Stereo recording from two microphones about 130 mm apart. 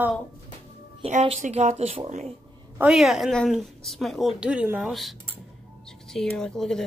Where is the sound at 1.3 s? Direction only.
75° right (ahead or behind); by 2.1 s 50° right (ahead or behind).